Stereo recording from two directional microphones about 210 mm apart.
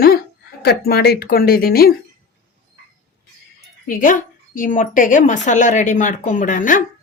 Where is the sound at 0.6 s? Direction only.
50° left (ahead or behind).